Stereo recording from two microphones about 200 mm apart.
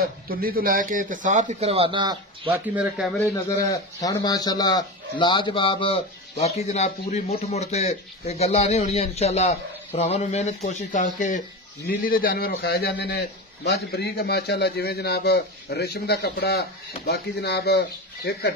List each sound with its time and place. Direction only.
0.0 s a man's voice: 50° right (ahead or behind); by 2.5 s 25° right (ahead or behind)
2.5 s speech: 5° right (ahead or behind)
3.4 s a man's voice: 20° left (ahead or behind); by 18.5 s 55° left (ahead or behind)